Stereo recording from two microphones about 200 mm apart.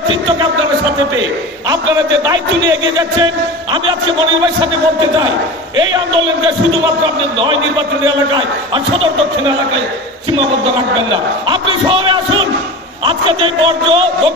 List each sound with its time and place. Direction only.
5.8 s a man's voice: 25° right (ahead or behind)
8.3 s a man's voice: 25° right (ahead or behind)
11.4 s a man's voice: 25° right (ahead or behind)